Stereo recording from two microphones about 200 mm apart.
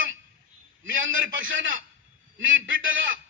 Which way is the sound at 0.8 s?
75° right (ahead or behind).